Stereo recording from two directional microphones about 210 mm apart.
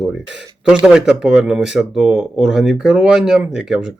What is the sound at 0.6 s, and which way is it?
Speech, 5° right (ahead or behind).